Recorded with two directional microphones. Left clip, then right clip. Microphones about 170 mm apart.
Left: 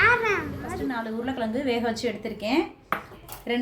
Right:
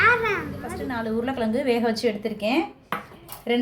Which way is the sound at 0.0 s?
Centre (ahead or behind).